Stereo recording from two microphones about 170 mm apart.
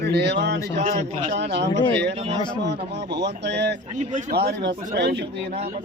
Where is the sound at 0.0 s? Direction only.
85° right.